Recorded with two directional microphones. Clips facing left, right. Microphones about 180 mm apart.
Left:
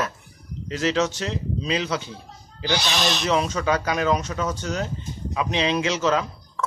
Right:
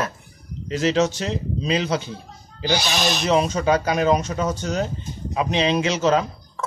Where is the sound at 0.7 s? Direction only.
25° right (ahead or behind).